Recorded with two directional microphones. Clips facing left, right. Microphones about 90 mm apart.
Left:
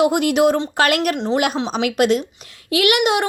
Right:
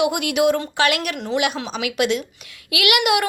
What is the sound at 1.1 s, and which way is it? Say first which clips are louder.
Speech: left 4 dB; 25° left (ahead or behind).